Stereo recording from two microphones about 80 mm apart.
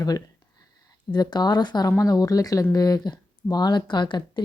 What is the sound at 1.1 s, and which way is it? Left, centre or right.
A woman's voice, left.